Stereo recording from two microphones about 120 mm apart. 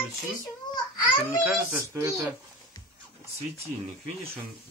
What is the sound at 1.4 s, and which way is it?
Speech, 15° right (ahead or behind).